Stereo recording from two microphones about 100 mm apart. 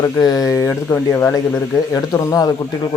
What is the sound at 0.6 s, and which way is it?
Speech, 25° left (ahead or behind).